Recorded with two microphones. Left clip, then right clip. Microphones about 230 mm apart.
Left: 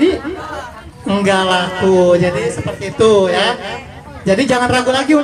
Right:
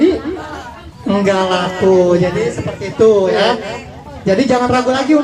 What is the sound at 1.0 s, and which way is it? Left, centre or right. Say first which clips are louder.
A man's voice: even; left.